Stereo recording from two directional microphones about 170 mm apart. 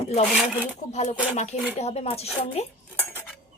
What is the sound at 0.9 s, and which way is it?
Speech, 40° left (ahead or behind).